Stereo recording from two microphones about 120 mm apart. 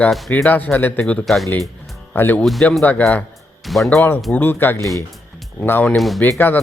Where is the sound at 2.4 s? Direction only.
Centre (ahead or behind).